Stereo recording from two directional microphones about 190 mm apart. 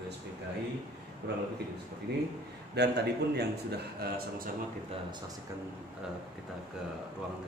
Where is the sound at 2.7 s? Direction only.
60° right (ahead or behind).